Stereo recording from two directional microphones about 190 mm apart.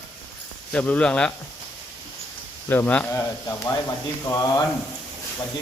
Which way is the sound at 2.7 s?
10° left (ahead or behind).